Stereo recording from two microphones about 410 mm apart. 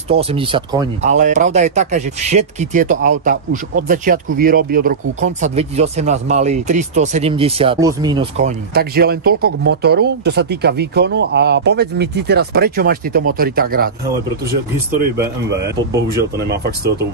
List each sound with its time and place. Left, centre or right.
0.1 s speech: centre
16.4 s speech: right